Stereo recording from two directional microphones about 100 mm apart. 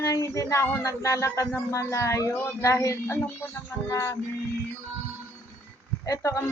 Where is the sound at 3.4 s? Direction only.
20° left (ahead or behind).